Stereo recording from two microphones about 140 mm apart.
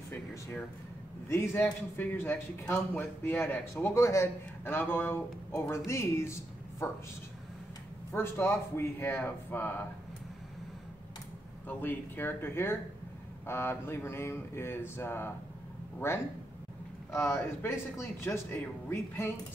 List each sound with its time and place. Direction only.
0.1 s music: 15° left (ahead or behind)
1.3 s a man's voice: 15° left (ahead or behind)
8.1 s a man's voice: 15° left (ahead or behind)
11.6 s a man's voice: 15° left (ahead or behind)